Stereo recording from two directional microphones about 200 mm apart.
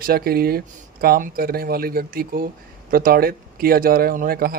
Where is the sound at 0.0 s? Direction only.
50° right (ahead or behind).